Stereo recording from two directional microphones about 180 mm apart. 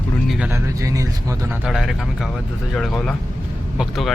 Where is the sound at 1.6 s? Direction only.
Centre (ahead or behind).